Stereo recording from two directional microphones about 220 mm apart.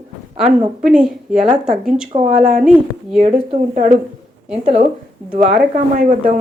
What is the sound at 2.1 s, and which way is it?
Speech, 25° right (ahead or behind).